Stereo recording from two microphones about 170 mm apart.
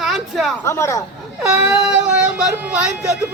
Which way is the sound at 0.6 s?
15° left (ahead or behind).